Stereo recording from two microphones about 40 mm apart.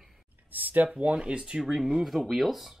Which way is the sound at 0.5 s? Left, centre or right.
Right.